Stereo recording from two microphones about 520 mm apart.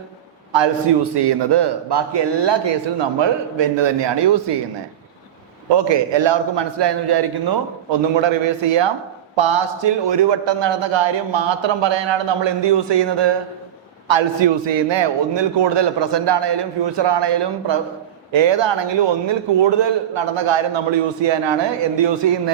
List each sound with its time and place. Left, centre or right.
1.1 s a man's voice: right
5.6 s a man's voice: right